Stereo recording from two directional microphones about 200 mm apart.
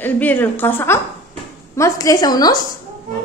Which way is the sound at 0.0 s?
10° left (ahead or behind).